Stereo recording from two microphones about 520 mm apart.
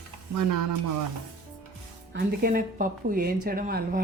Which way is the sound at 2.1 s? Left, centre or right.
Centre.